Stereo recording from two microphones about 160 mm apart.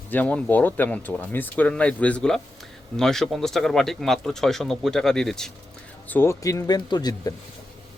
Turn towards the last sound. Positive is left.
turn(degrees=25)  # may be behind; listen again after turning